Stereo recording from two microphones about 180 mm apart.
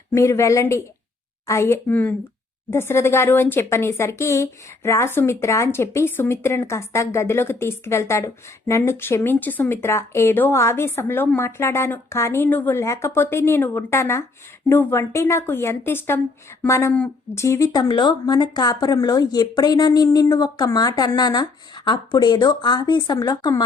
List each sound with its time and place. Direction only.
0.1 s speech: 15° left (ahead or behind)